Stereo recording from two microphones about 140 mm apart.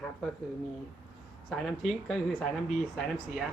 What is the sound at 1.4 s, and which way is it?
Speech, 5° left (ahead or behind).